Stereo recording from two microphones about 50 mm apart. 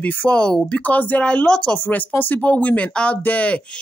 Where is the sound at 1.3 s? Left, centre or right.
Left.